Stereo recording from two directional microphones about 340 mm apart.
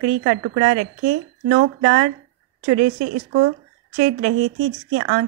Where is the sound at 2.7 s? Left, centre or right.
Right.